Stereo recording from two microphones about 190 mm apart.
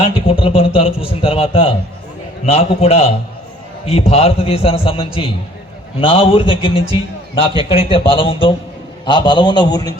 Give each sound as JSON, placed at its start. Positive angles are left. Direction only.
{"t": 0.0, "sound": "a man's voice", "side_deg": 30}